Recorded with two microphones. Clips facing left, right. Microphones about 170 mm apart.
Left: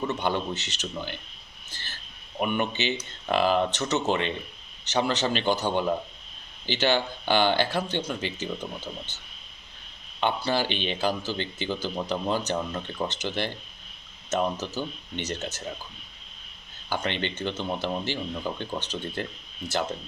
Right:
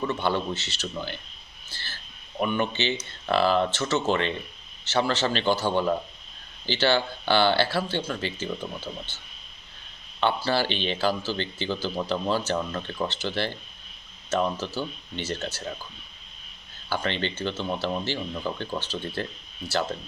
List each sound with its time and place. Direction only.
0.1 s speech: 15° left (ahead or behind)
1.7 s a sound: 20° left (ahead or behind)
2.4 s speech: 15° left (ahead or behind)
16.9 s speech: 20° left (ahead or behind)